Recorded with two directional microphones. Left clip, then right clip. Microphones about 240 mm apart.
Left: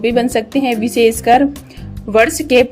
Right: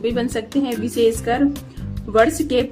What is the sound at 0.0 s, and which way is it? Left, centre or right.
A woman's voice, left.